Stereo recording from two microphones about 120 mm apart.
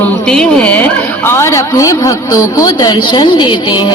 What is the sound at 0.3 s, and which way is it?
A woman's voice, 5° left (ahead or behind).